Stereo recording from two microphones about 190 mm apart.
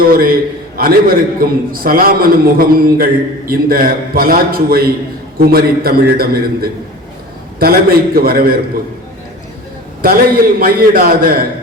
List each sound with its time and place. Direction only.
0.1 s a man's voice: 50° right (ahead or behind)
10.0 s a man's voice: 50° right (ahead or behind)